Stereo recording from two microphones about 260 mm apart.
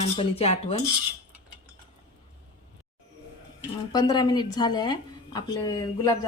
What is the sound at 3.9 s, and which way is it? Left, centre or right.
Speech, centre.